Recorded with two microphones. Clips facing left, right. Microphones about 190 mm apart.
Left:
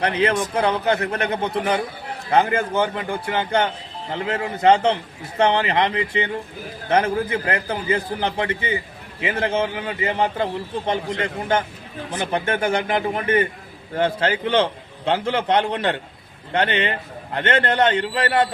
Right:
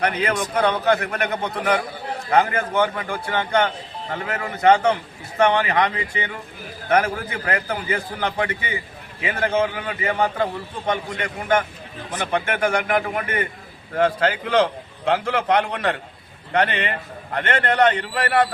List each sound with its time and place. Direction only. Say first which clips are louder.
0.0 s a man's voice: left 2 dB; 30° left (ahead or behind)